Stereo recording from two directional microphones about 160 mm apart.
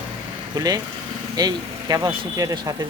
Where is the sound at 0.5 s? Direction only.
25° right (ahead or behind).